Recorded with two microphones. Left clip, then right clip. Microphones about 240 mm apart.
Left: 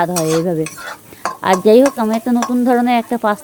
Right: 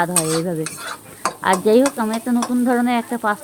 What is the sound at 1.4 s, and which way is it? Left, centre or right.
Speech, left.